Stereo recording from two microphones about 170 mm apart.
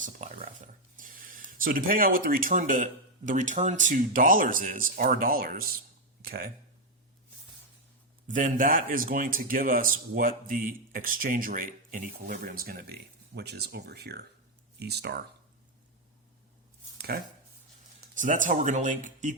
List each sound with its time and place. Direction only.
0.0 s a man's voice: 50° right (ahead or behind)
8.4 s a man's voice: 55° right (ahead or behind); by 15.2 s 70° right (ahead or behind)
17.1 s a man's voice: 65° right (ahead or behind)
18.1 s speech: 50° right (ahead or behind)